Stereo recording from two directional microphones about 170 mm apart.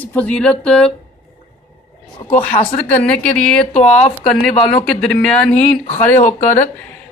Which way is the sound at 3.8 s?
40° left (ahead or behind).